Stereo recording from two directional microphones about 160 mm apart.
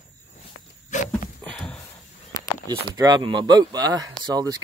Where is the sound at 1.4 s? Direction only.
5° left (ahead or behind).